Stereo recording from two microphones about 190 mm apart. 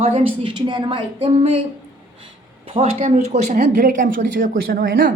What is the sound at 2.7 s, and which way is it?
Speech, 30° right (ahead or behind).